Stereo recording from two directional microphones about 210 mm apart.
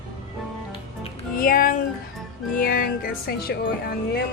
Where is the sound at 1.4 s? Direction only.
40° left (ahead or behind).